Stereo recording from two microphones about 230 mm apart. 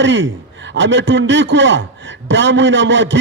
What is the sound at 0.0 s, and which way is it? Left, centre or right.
A man's voice, right.